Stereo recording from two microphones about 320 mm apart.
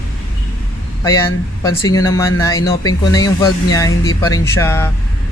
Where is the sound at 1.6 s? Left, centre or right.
Centre.